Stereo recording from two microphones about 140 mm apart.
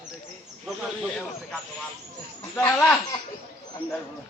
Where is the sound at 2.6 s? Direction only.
10° left (ahead or behind).